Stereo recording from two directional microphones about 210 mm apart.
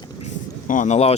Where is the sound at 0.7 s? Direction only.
35° left (ahead or behind).